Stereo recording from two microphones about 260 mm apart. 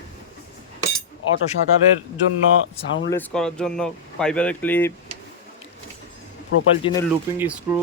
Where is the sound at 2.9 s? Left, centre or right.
Left.